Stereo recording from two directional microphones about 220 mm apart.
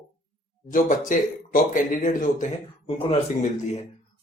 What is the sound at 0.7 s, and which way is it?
Speech, 40° left (ahead or behind).